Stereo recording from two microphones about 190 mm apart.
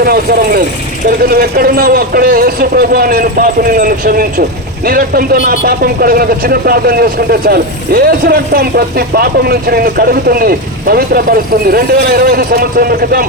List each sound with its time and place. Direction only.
0.0 s speech: 50° right (ahead or behind)